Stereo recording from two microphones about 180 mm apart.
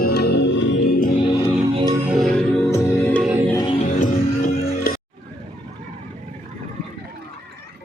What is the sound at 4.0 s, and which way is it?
Music, 45° left (ahead or behind).